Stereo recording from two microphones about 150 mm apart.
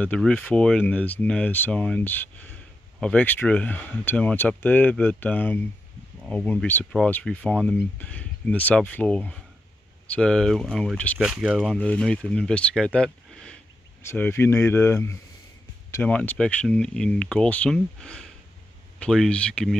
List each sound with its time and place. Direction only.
0.0 s speech: 10° left (ahead or behind)
11.1 s speech: 5° right (ahead or behind)
11.8 s speech: 5° left (ahead or behind)